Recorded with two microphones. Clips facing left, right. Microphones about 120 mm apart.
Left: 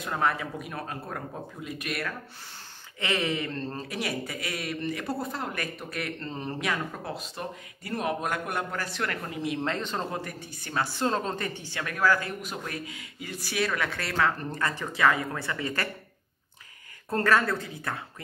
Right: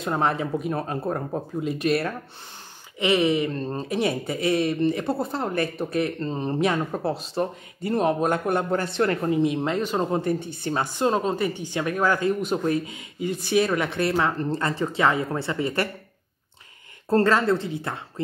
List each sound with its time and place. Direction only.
0.0 s speech: 25° right (ahead or behind)
3.0 s speech: 15° right (ahead or behind)
10.1 s speech: 25° right (ahead or behind)
17.1 s speech: 25° right (ahead or behind)